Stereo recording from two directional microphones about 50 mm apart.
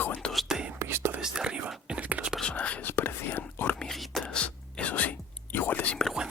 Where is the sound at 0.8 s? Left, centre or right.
Right.